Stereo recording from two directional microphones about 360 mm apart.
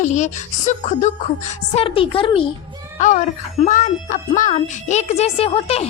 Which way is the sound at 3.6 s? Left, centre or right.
Left.